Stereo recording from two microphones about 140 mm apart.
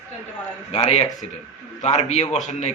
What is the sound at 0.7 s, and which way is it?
A woman's voice, 50° left (ahead or behind).